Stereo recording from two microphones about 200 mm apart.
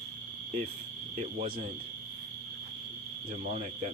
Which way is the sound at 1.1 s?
35° right (ahead or behind).